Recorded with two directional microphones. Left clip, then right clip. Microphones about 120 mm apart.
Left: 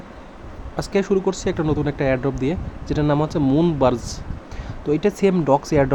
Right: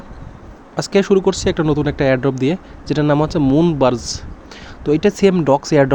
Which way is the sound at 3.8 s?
30° right (ahead or behind).